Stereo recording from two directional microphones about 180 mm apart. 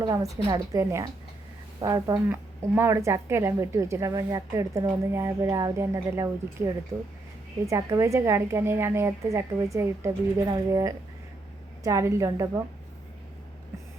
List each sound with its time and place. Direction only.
0.0 s a woman's voice: 20° right (ahead or behind)